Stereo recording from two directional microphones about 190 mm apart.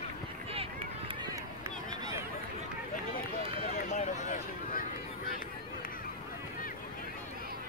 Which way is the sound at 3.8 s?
40° left (ahead or behind).